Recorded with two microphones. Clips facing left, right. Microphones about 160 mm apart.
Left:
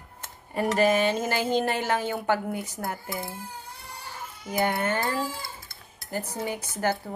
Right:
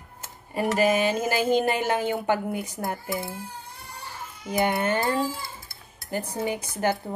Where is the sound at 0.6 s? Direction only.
10° right (ahead or behind).